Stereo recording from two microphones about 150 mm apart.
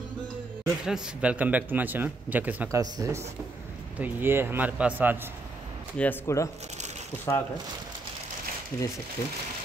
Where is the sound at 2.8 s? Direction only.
20° right (ahead or behind).